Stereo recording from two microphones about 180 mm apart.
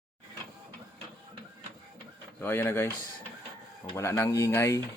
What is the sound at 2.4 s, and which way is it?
Speech, 10° left (ahead or behind).